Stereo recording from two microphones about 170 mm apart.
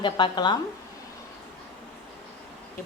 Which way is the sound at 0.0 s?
25° left (ahead or behind).